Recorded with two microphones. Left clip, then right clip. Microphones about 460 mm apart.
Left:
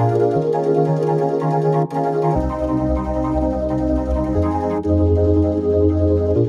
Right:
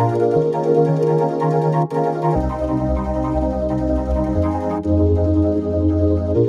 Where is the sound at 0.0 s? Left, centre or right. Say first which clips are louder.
Right 1 dB; right.